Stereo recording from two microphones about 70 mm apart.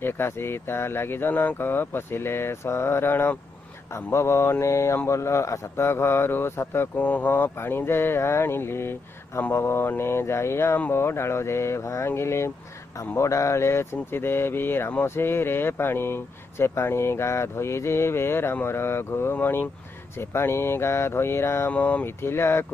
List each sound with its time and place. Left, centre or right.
0.0 s speech: left
7.0 s speech: left
21.7 s speech: left
22.2 s speech: left